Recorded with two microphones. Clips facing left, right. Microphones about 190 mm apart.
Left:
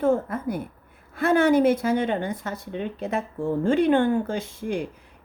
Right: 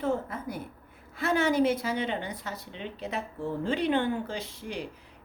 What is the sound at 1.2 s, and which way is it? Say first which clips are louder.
A woman's voice: left 6 dB; 55° left (ahead or behind).